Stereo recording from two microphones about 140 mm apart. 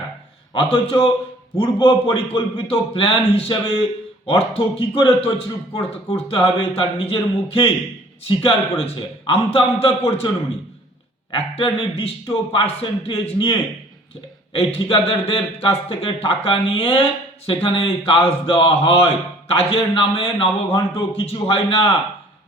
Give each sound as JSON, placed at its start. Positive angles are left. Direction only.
{"t": 0.5, "sound": "a man's voice", "side_deg": 40}
{"t": 8.3, "sound": "a man's voice", "side_deg": 40}
{"t": 11.3, "sound": "a man's voice", "side_deg": 40}